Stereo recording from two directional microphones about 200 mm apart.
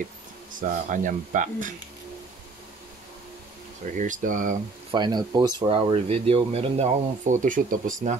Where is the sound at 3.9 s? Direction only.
40° right (ahead or behind).